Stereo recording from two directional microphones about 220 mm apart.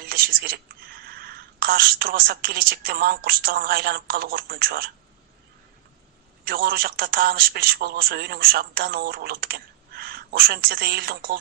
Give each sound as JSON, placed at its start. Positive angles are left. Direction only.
{"t": 0.0, "sound": "speech", "side_deg": -45}
{"t": 6.4, "sound": "speech", "side_deg": -45}